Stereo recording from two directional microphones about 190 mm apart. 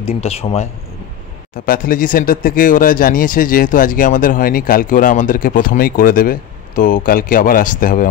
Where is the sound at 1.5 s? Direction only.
50° left (ahead or behind).